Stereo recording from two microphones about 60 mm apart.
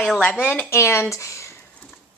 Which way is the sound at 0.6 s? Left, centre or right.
Left.